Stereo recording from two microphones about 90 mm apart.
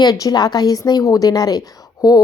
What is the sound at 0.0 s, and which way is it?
A woman's voice, 45° left (ahead or behind).